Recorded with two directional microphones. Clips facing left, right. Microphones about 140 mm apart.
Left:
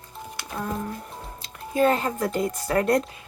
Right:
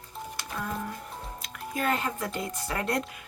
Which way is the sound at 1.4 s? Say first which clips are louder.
Left 10 dB; 30° left (ahead or behind).